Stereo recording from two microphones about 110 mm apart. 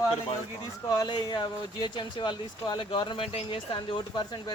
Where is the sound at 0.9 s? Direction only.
40° left (ahead or behind).